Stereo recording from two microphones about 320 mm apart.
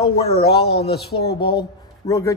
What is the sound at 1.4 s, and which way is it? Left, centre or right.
Speech, centre.